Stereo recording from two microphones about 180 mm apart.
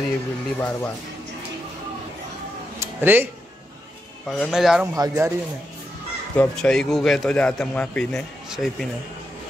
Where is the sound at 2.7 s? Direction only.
10° right (ahead or behind).